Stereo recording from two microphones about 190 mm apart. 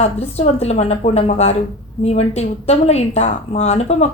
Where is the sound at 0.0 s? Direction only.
35° left (ahead or behind).